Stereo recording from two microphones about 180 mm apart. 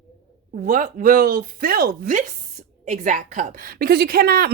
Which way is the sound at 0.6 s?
45° right (ahead or behind).